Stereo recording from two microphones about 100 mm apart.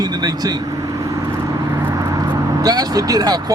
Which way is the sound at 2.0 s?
35° right (ahead or behind).